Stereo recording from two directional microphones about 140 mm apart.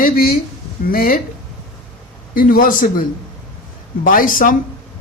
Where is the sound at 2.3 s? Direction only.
80° left.